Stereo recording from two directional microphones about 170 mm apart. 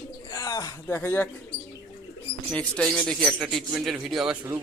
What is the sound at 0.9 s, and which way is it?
Speech, 10° left (ahead or behind).